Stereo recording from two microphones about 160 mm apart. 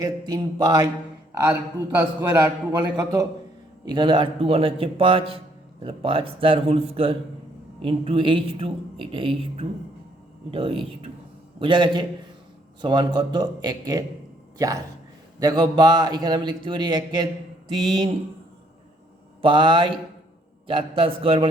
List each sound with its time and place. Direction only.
0.0 s a man's voice: 25° right (ahead or behind)
1.3 s a man's voice: 15° right (ahead or behind); by 18.1 s 30° right (ahead or behind)
19.4 s a woman's voice: 30° right (ahead or behind)